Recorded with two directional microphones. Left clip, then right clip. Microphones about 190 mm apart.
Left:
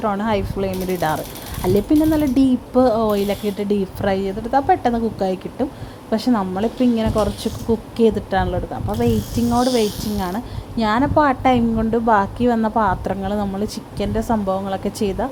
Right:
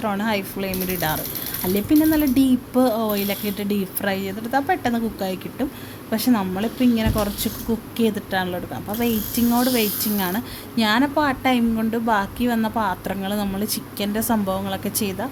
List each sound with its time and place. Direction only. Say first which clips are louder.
0.0 s speech: left 3 dB; 10° left (ahead or behind)